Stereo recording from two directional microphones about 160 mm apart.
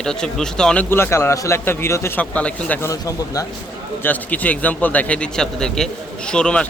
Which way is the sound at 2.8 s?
20° left (ahead or behind).